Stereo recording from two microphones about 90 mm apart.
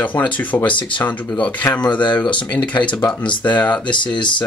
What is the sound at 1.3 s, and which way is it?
Speech, 15° left (ahead or behind).